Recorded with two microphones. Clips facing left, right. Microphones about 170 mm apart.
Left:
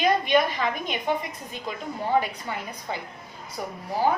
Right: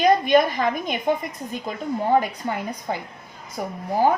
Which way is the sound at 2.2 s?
45° right (ahead or behind).